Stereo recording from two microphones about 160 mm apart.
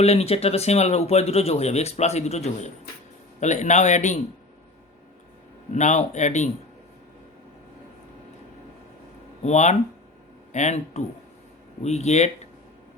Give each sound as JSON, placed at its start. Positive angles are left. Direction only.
{"t": 0.0, "sound": "a man's voice", "side_deg": 40}
{"t": 5.7, "sound": "a man's voice", "side_deg": 50}
{"t": 9.4, "sound": "a man's voice", "side_deg": 45}